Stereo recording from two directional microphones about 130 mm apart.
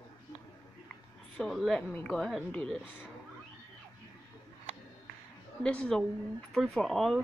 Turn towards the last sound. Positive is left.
turn(degrees=0)  # may be behind; listen again after turning